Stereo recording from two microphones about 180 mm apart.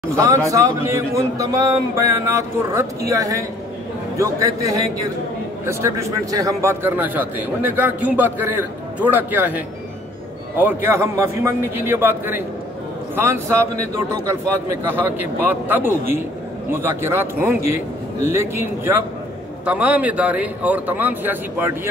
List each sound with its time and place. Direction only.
0.1 s a man's voice: 15° right (ahead or behind)
5.7 s a man's voice: 15° right (ahead or behind)
14.9 s a man's voice: 10° right (ahead or behind)